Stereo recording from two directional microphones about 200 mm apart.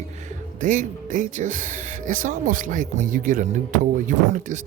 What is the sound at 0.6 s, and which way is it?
Speech, 40° right (ahead or behind).